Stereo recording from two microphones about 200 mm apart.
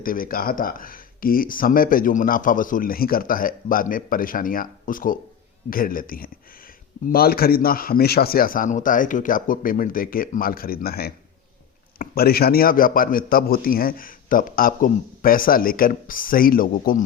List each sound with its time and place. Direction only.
0.0 s speech: 45° left (ahead or behind)